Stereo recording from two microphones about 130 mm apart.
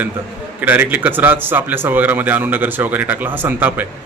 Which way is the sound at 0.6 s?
15° right (ahead or behind).